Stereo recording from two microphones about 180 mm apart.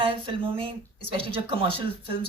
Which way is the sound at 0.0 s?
30° right (ahead or behind).